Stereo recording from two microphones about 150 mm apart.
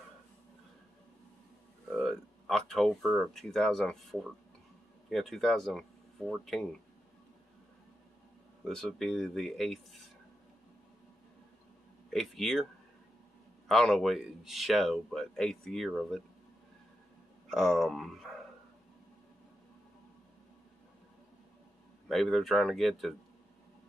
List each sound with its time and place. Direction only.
1.9 s speech: centre (ahead or behind)
8.6 s speech: 5° left (ahead or behind)
12.1 s speech: centre (ahead or behind)
13.7 s speech: 5° left (ahead or behind)
17.5 s speech: centre (ahead or behind)
22.0 s speech: centre (ahead or behind)